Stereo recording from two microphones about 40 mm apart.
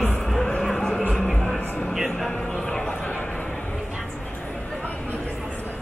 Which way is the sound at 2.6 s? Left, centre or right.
Centre.